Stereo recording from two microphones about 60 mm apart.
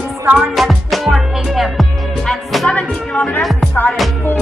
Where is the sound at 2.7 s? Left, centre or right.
Centre.